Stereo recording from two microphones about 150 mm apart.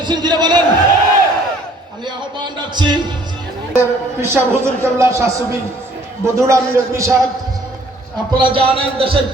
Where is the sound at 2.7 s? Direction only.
30° right (ahead or behind).